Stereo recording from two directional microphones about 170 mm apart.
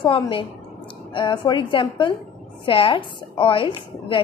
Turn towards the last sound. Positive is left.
turn(degrees=30)  # may be behind; listen again after turning